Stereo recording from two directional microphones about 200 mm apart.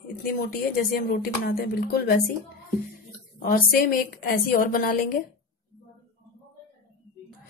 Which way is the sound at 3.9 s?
45° left (ahead or behind).